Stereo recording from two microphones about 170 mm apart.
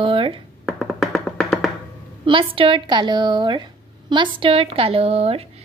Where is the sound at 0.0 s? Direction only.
30° right (ahead or behind).